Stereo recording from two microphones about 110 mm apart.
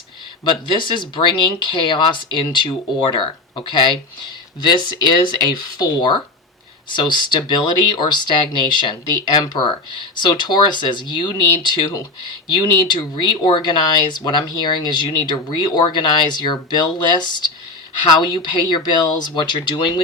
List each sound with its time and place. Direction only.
0.7 s speech: 45° left (ahead or behind)
13.1 s speech: 45° left (ahead or behind)